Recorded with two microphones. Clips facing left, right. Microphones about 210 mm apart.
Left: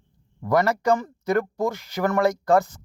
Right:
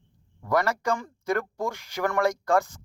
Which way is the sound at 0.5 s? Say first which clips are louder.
Left 5 dB; 15° left (ahead or behind).